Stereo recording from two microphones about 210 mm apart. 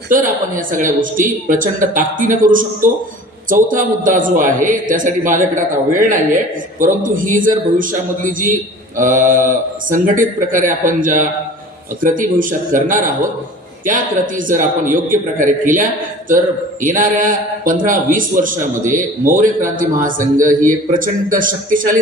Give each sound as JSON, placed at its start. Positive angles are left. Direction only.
{"t": 0.1, "sound": "a man's voice", "side_deg": -40}